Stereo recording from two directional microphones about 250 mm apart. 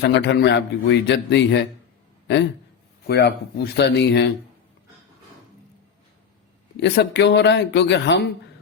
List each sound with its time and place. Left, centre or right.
0.0 s a man's voice: left
6.7 s speech: left